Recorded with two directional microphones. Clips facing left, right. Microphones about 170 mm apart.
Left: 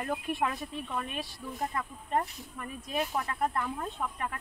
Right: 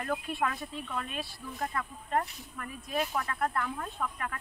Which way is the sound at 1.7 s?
20° left (ahead or behind).